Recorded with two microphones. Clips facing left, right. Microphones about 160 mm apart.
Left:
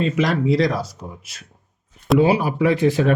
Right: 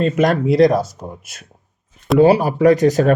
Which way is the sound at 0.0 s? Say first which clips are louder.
Right 4 dB; 50° right (ahead or behind).